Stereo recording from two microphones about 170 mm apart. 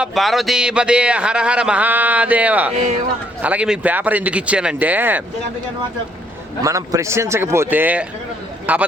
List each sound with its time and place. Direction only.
0.0 s speech: centre (ahead or behind)
6.6 s speech: 20° right (ahead or behind)